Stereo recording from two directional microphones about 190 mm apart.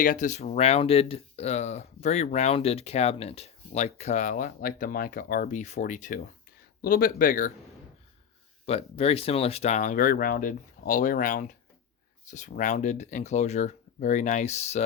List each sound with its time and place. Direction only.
0.0 s speech: 45° left (ahead or behind)
8.6 s speech: 30° left (ahead or behind)